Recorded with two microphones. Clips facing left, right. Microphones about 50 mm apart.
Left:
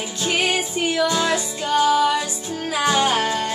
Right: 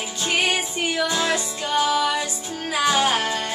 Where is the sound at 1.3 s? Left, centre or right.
Centre.